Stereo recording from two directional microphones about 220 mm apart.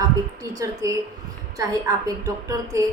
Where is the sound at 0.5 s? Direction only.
15° right (ahead or behind).